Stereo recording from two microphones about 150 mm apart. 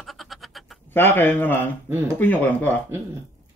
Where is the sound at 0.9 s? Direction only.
15° left (ahead or behind).